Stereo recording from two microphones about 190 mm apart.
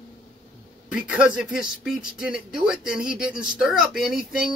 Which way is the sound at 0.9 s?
5° right (ahead or behind).